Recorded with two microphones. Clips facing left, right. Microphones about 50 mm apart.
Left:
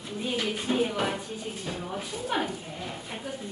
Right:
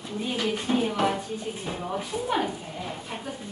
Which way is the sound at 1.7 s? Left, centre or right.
Centre.